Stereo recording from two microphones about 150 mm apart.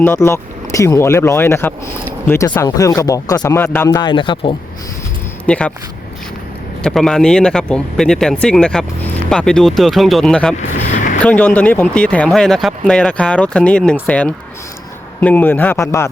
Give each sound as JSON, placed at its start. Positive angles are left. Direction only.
{"t": 0.0, "sound": "speech", "side_deg": 15}
{"t": 3.9, "sound": "speech", "side_deg": 30}
{"t": 5.5, "sound": "speech", "side_deg": 10}
{"t": 6.8, "sound": "speech", "side_deg": 5}
{"t": 10.6, "sound": "vehicle", "side_deg": 55}
{"t": 11.2, "sound": "speech", "side_deg": 10}